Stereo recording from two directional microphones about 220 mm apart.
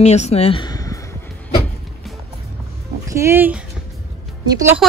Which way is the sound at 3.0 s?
15° right (ahead or behind).